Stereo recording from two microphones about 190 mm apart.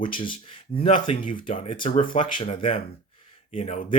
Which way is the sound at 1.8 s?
45° left (ahead or behind).